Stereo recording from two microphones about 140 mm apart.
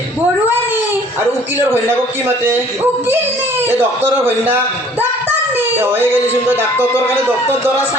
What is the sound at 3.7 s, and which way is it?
Speech, 15° right (ahead or behind).